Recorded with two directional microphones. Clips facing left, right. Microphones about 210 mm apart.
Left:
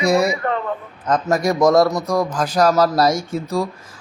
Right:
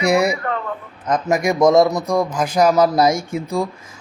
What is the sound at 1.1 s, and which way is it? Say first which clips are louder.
A man's voice: even; 15° right (ahead or behind).